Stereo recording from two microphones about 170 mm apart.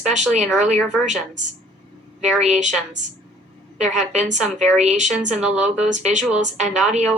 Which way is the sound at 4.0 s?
45° right (ahead or behind).